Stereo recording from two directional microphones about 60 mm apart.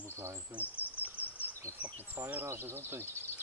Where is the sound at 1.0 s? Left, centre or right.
Right.